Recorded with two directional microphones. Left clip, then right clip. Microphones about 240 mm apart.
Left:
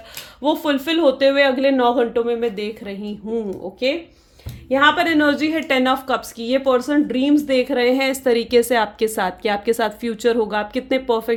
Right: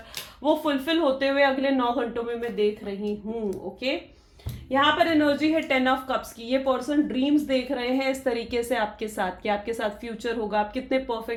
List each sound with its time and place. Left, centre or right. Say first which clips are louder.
0.4 s speech: left 4 dB; left
4.7 s speech: left 6 dB; left